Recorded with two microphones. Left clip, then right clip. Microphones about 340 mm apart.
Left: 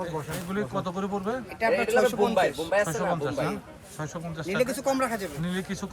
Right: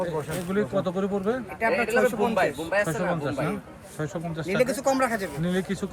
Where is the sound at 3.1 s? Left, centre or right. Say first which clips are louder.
Even; centre.